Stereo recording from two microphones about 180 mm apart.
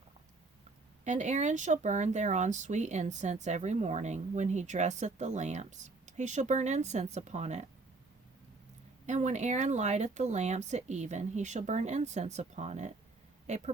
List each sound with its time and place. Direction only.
1.0 s speech: 40° right (ahead or behind)
9.0 s speech: 40° right (ahead or behind)